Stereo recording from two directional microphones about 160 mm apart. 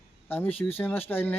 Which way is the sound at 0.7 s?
10° left (ahead or behind).